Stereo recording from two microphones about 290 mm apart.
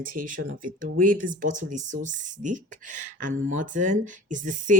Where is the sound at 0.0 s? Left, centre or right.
Right.